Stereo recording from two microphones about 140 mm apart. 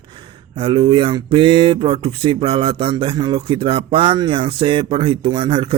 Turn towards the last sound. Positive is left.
turn(degrees=-35)  # may be behind; listen again after turning